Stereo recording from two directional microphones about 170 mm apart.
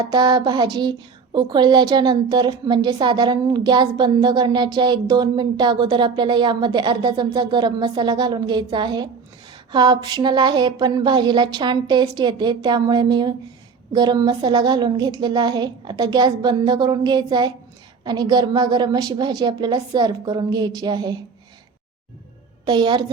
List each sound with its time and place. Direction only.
0.0 s speech: 25° right (ahead or behind)
22.6 s speech: 25° right (ahead or behind)